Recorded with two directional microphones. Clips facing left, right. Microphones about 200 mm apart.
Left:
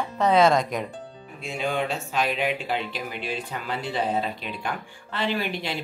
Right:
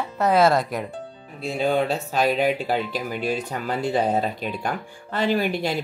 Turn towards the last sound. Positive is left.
turn(degrees=-45)  # may be behind; listen again after turning